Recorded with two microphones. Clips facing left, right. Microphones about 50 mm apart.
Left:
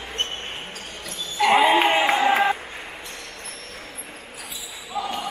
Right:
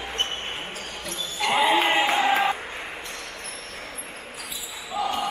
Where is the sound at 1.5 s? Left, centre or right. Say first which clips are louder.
Left 3 dB; centre.